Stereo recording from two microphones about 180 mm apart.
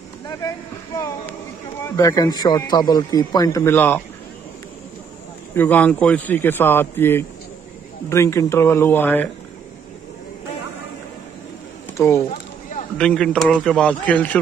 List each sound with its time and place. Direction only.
0.3 s a man's voice: 15° left (ahead or behind)
5.5 s a man's voice: 10° left (ahead or behind)
12.0 s a man's voice: 15° left (ahead or behind)
12.9 s a man's voice: 5° left (ahead or behind)